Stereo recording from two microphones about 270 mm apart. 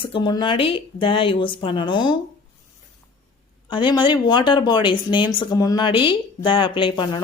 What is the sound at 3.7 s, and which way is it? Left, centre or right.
Speech, centre.